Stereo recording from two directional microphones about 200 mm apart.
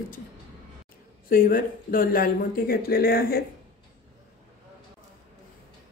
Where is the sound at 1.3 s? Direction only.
45° left (ahead or behind).